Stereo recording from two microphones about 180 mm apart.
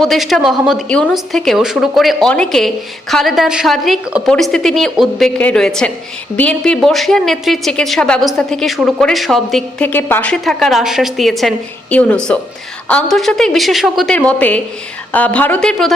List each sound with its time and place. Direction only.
0.0 s a woman's voice: centre (ahead or behind)